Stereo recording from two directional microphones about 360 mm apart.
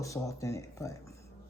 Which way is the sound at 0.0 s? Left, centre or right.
Centre.